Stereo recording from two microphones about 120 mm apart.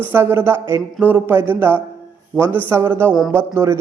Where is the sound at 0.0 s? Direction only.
20° right (ahead or behind).